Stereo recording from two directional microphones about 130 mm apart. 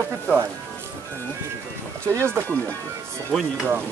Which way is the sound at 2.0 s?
20° right (ahead or behind).